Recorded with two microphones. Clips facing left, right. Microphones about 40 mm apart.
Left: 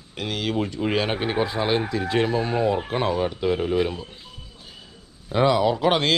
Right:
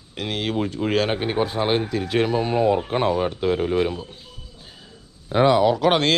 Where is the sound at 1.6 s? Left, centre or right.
Right.